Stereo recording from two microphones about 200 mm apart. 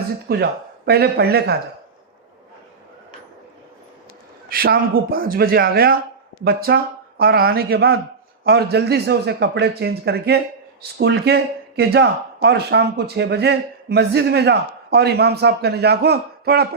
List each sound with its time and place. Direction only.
0.3 s a man's voice: 50° right (ahead or behind)
4.4 s a man's voice: 50° right (ahead or behind)